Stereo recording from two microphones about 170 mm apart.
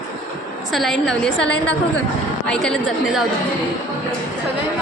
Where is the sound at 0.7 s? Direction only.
Centre (ahead or behind).